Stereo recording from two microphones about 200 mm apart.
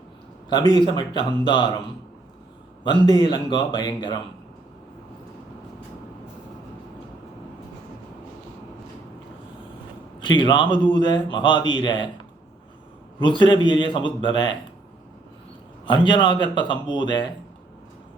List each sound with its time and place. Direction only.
0.7 s speech: 20° left (ahead or behind)
2.8 s speech: 25° left (ahead or behind)
10.2 s a man's voice: 25° left (ahead or behind)
13.1 s speech: 25° left (ahead or behind)
15.9 s speech: 25° left (ahead or behind)